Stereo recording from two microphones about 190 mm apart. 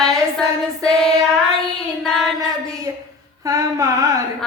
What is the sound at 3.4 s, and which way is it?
Mantra, 15° right (ahead or behind).